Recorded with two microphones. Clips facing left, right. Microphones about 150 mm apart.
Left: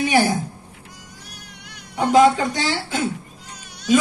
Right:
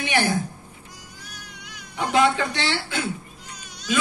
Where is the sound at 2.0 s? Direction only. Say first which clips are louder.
Left 6 dB; 40° left (ahead or behind).